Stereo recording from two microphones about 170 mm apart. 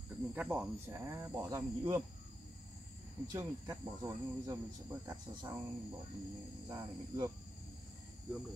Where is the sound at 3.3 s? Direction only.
20° right (ahead or behind).